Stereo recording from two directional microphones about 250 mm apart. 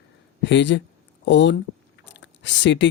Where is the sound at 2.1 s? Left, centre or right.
Left.